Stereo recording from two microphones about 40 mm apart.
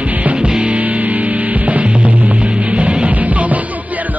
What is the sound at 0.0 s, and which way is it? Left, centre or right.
Music, right.